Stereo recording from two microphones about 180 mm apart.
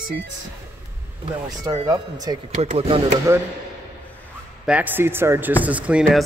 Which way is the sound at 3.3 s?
15° right (ahead or behind).